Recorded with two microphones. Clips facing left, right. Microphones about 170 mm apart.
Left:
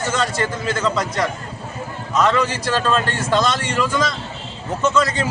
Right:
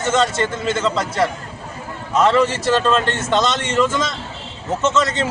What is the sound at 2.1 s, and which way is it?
A man's voice, 30° right (ahead or behind).